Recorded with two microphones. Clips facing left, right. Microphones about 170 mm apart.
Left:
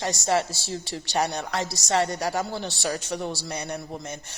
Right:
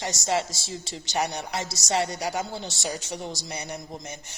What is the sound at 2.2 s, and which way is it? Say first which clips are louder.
Speech: left 2 dB; 80° left.